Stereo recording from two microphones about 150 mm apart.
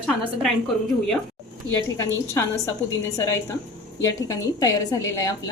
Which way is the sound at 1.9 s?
20° left (ahead or behind).